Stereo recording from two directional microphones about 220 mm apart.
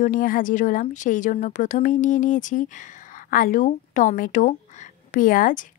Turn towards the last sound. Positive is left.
turn(degrees=40)  # may be behind; listen again after turning